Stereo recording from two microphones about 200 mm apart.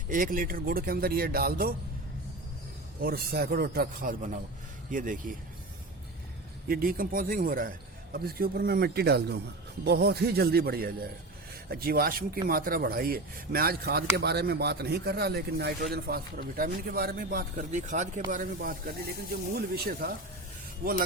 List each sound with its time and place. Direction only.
0.1 s a man's voice: 45° right (ahead or behind)
3.0 s a man's voice: 50° right (ahead or behind)
6.7 s a man's voice: 45° right (ahead or behind)